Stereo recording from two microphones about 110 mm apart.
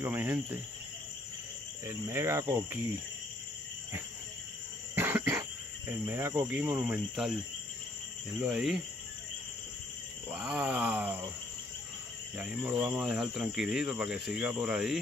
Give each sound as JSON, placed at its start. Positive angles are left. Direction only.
{"t": 0.0, "sound": "groan", "side_deg": -20}
{"t": 1.9, "sound": "speech", "side_deg": -25}
{"t": 4.9, "sound": "cough", "side_deg": -20}
{"t": 5.9, "sound": "speech", "side_deg": -25}
{"t": 8.4, "sound": "speech", "side_deg": -5}
{"t": 10.3, "sound": "groan", "side_deg": -10}
{"t": 12.4, "sound": "groan", "side_deg": -10}
{"t": 13.0, "sound": "speech", "side_deg": 0}